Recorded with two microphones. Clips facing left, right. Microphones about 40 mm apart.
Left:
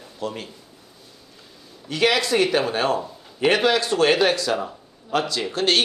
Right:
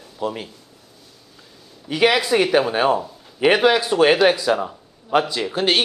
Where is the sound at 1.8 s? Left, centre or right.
Centre.